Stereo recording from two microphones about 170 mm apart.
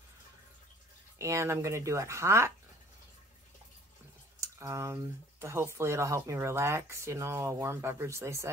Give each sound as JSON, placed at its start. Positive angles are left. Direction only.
{"t": 1.1, "sound": "speech", "side_deg": -15}
{"t": 4.4, "sound": "speech", "side_deg": -15}